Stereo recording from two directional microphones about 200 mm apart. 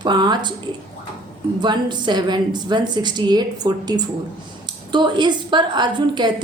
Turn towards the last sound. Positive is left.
turn(degrees=-20)  # may be behind; listen again after turning